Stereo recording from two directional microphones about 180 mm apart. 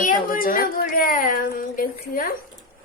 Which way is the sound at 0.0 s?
50° left (ahead or behind).